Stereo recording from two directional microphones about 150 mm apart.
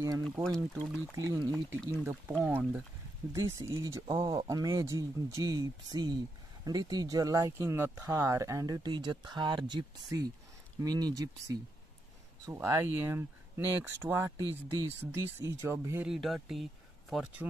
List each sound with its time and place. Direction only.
0.2 s speech: 5° left (ahead or behind)
1.1 s speech: 20° right (ahead or behind)
2.4 s speech: 10° right (ahead or behind)
16.1 s speech: centre (ahead or behind)